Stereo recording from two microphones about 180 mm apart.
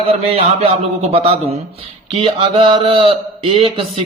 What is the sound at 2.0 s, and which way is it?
Speech, 30° right (ahead or behind).